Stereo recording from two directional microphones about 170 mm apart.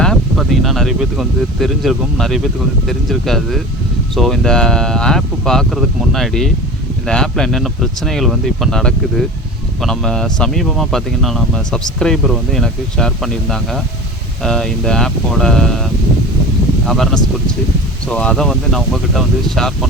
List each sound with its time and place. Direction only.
0.0 s speech: centre (ahead or behind)